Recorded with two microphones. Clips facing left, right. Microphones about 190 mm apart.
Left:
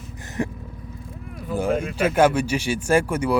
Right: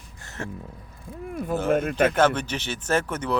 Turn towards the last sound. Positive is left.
turn(degrees=10)  # may be behind; listen again after turning